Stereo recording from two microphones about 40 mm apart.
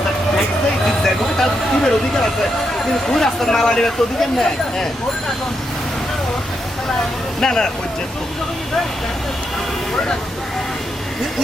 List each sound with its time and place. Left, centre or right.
0.9 s vehicle: centre
3.1 s speech: centre
7.4 s speech: centre